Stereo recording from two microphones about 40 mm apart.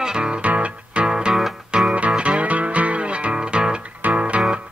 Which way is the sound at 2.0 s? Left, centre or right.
Right.